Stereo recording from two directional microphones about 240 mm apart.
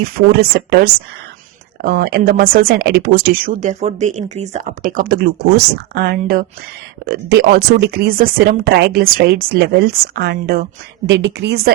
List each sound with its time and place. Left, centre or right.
0.0 s speech: right